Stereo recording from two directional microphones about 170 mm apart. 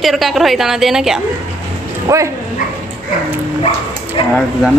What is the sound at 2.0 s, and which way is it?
Speech, 15° right (ahead or behind).